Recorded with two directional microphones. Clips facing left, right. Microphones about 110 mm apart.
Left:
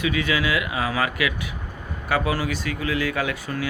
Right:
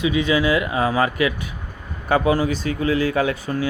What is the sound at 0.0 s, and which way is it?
Speech, 25° right (ahead or behind).